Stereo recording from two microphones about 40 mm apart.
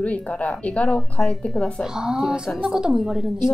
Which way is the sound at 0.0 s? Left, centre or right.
Left.